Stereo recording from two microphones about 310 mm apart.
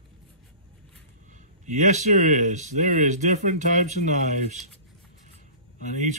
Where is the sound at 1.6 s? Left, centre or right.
Right.